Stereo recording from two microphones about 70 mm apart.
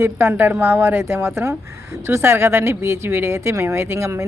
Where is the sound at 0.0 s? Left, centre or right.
Right.